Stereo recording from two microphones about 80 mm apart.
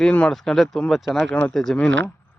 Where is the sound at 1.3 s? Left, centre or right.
Centre.